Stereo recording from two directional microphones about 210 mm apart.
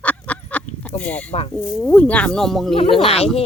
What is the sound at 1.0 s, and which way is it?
Speech, 5° left (ahead or behind).